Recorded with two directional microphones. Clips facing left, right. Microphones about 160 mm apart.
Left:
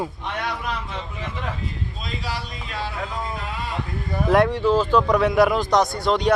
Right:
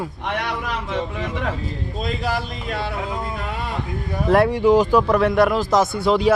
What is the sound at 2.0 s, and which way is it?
Speech, 50° right (ahead or behind).